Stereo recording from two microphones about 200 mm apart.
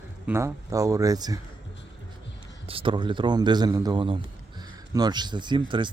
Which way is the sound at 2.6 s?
25° right (ahead or behind).